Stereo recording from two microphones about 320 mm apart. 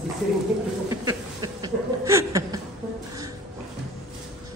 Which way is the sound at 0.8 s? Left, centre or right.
Centre.